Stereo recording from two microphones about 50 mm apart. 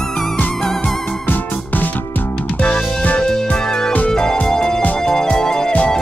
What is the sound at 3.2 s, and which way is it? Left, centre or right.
Music, centre.